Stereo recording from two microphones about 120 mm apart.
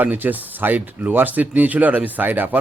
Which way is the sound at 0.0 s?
15° right (ahead or behind).